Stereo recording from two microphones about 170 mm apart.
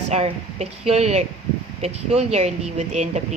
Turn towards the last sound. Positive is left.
turn(degrees=-40)  # may be behind; listen again after turning